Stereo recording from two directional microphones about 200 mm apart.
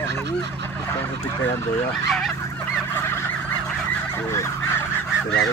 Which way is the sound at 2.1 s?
Centre (ahead or behind).